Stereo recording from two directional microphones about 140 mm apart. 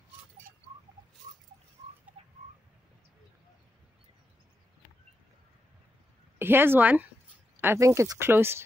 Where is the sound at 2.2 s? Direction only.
45° right (ahead or behind).